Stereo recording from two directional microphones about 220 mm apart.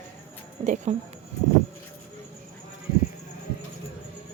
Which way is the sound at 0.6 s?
30° right (ahead or behind).